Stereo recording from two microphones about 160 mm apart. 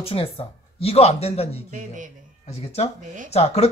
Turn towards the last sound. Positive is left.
turn(degrees=40)  # may be behind; listen again after turning